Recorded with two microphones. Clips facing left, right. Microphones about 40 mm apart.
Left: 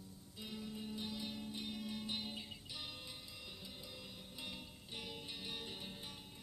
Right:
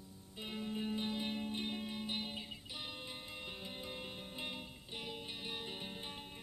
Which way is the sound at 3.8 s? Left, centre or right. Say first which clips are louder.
Right 6 dB; right.